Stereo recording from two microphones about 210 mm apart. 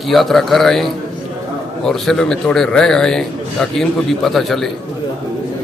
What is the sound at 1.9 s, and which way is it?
A man's voice, centre (ahead or behind).